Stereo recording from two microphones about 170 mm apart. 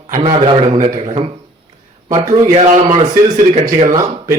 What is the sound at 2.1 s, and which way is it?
Speech, 45° right (ahead or behind).